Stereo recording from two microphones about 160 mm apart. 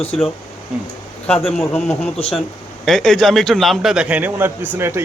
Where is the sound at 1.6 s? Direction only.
15° left (ahead or behind).